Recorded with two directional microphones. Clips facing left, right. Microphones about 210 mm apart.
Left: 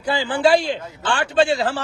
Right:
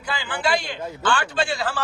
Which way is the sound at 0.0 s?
30° left (ahead or behind).